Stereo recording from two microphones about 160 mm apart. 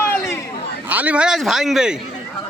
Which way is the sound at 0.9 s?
10° right (ahead or behind).